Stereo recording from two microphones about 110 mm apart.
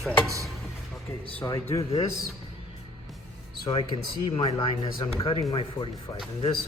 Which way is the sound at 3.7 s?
45° left (ahead or behind).